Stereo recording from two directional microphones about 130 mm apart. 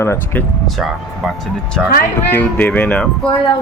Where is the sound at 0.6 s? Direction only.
Centre (ahead or behind).